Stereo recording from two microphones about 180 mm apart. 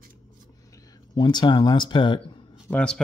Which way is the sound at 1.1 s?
25° left (ahead or behind).